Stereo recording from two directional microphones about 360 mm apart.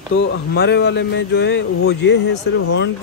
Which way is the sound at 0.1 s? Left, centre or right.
Left.